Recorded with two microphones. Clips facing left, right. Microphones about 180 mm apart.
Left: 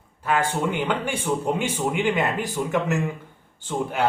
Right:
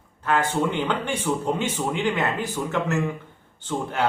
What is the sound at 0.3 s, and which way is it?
Speech, 10° left (ahead or behind).